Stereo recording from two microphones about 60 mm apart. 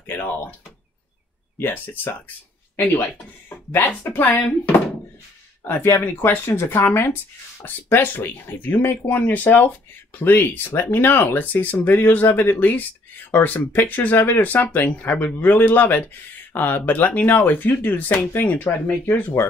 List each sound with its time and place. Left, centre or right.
0.0 s door: left
1.6 s speech: left
3.4 s a sound: left
4.1 s speech: left
5.6 s speech: left
7.6 s speech: left